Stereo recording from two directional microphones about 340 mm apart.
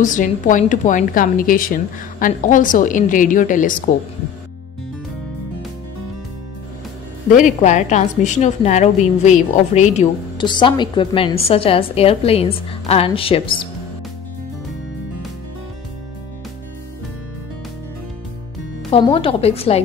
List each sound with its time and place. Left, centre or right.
0.0 s a woman's voice: left
7.2 s a woman's voice: left
18.9 s a woman's voice: centre